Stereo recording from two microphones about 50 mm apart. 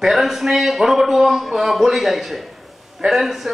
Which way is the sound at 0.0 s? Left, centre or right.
Centre.